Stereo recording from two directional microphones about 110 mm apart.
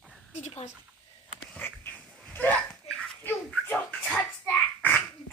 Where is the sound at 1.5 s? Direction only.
20° left (ahead or behind).